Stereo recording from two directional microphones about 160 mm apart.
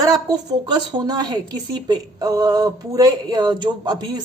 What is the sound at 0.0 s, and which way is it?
Speech, 25° right (ahead or behind).